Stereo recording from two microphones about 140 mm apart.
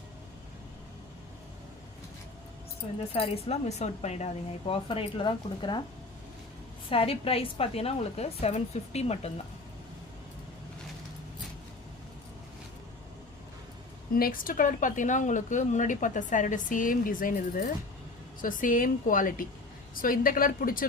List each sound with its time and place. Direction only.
3.1 s speech: 45° left (ahead or behind)
6.9 s speech: 45° left (ahead or behind)
14.2 s speech: 85° left
18.4 s speech: 75° left (ahead or behind)
20.0 s speech: 90° left